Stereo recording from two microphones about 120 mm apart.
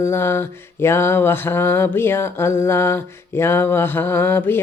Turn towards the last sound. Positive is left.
turn(degrees=20)  # may be behind; listen again after turning